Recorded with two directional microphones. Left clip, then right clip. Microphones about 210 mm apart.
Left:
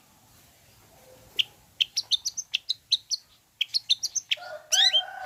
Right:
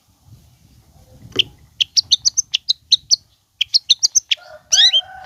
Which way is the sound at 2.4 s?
Centre (ahead or behind).